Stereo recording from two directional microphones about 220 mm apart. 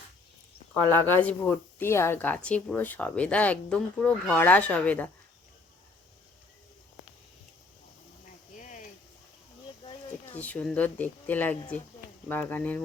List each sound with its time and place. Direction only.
0.7 s speech: 10° left (ahead or behind)
8.5 s a sound: 35° left (ahead or behind)
10.3 s speech: 5° left (ahead or behind)